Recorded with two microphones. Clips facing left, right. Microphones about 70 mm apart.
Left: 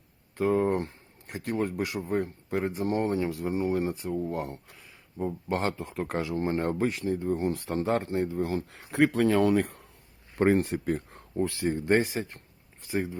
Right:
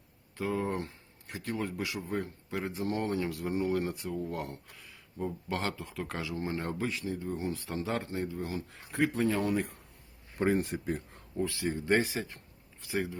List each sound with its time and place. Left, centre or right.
0.3 s speech: left
5.5 s speech: left
11.3 s speech: left